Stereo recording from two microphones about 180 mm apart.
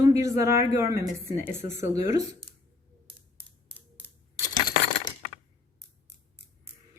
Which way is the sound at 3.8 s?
10° left (ahead or behind).